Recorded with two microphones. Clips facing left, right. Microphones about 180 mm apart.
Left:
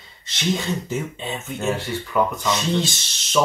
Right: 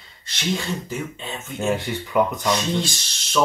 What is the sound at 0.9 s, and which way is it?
Speech, 20° left (ahead or behind).